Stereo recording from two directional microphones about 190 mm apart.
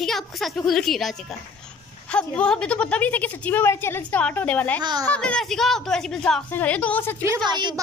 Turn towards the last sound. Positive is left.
turn(degrees=-25)  # may be behind; listen again after turning